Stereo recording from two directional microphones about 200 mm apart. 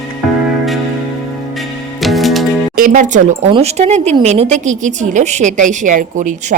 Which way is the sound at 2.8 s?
40° right (ahead or behind).